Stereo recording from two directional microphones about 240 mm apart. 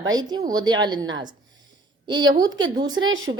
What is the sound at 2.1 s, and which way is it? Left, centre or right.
Speech, centre.